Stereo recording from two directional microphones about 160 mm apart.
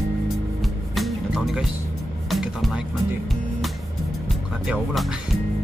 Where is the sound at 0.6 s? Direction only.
Centre (ahead or behind).